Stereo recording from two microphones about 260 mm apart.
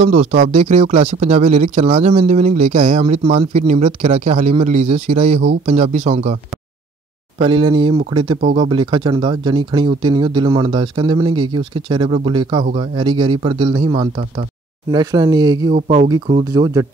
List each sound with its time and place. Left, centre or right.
0.0 s speech: right
7.3 s speech: centre